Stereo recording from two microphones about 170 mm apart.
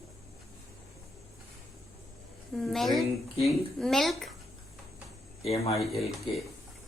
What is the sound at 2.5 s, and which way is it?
A woman's voice, centre (ahead or behind).